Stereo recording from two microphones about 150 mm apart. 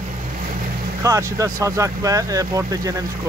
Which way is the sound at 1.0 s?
20° right (ahead or behind).